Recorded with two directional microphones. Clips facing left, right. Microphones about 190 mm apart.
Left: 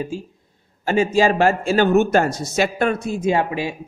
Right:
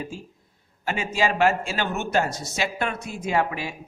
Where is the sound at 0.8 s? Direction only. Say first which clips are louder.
Left 8 dB; 40° left (ahead or behind).